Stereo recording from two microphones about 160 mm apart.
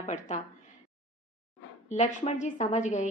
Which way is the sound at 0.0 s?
45° left (ahead or behind).